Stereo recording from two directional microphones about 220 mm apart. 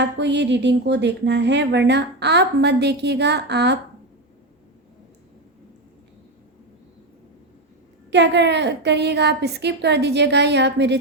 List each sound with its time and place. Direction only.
0.0 s speech: 50° right (ahead or behind)
8.1 s speech: 50° right (ahead or behind)